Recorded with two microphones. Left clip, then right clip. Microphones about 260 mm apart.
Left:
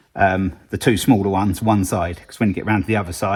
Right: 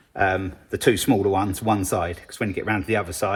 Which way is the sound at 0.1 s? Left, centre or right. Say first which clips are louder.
Left 4 dB; left.